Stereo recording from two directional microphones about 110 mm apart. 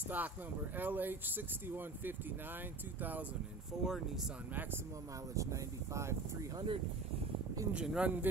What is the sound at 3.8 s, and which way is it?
Speech, 5° right (ahead or behind).